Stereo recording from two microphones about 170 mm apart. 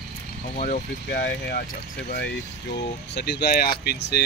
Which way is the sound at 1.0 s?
75° left (ahead or behind).